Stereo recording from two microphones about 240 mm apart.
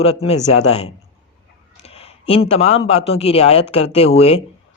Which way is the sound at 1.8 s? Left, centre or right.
Left.